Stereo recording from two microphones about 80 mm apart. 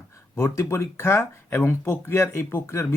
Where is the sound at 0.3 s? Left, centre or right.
Left.